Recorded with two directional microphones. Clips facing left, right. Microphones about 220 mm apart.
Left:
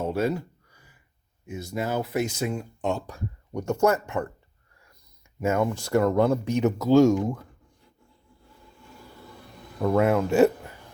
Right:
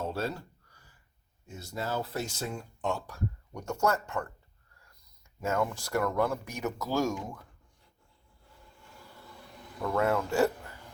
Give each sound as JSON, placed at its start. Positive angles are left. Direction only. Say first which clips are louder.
{"t": 0.0, "sound": "a sound", "louder": "left 8 dB", "side_deg": 15}
{"t": 1.5, "sound": "speech", "louder": "left 6 dB", "side_deg": 15}
{"t": 5.4, "sound": "speech", "louder": "left 6 dB", "side_deg": 20}
{"t": 9.9, "sound": "speech", "louder": "left 6 dB", "side_deg": 20}